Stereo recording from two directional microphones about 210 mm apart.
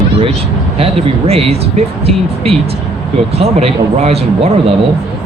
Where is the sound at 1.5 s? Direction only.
30° right (ahead or behind).